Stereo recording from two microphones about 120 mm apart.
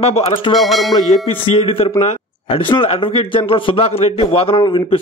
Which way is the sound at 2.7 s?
50° left (ahead or behind).